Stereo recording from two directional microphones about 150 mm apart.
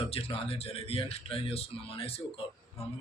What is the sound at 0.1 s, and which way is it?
Speech, 40° left (ahead or behind).